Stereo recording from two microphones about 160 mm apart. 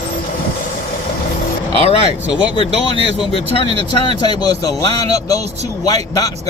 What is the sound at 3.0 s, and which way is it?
A man's voice, 35° left (ahead or behind).